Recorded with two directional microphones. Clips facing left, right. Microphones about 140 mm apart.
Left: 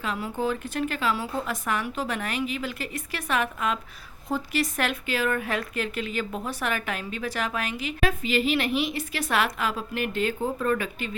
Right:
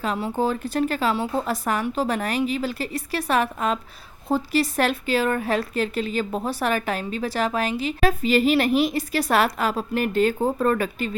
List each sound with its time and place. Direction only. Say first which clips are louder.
0.0 s speech: right 4 dB; 35° right (ahead or behind)